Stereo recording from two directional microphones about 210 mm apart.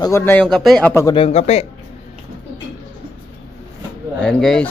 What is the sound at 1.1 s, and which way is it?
Speech, 30° left (ahead or behind).